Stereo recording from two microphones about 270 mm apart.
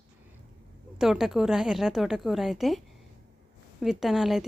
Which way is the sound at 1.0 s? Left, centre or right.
Centre.